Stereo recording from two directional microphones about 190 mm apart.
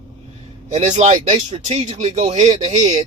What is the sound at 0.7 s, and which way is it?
Speech, 35° right (ahead or behind).